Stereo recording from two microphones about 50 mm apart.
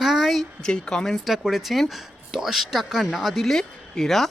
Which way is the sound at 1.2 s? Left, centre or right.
Centre.